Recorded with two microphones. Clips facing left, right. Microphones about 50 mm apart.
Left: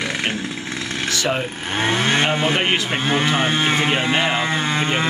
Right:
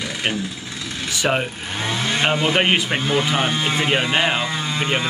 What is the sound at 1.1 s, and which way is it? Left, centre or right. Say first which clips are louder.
Speech: right 2 dB; centre.